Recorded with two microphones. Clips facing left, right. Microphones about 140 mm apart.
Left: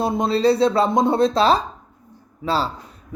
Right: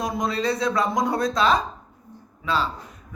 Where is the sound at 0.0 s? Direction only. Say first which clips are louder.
Left 7 dB; 30° left (ahead or behind).